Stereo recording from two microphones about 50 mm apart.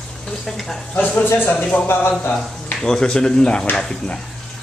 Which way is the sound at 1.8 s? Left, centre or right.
Left.